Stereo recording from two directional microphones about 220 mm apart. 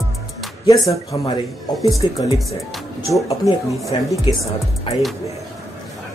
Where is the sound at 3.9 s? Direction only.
25° left (ahead or behind).